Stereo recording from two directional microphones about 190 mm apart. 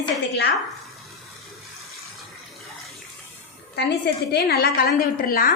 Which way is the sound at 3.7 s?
60° left (ahead or behind).